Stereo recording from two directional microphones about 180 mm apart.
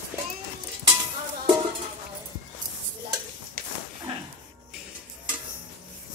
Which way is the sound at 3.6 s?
50° right (ahead or behind).